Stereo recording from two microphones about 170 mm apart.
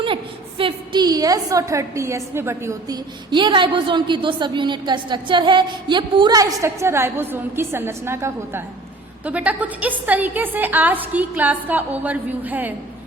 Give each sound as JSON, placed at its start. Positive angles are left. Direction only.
{"t": 0.6, "sound": "a woman's voice", "side_deg": -25}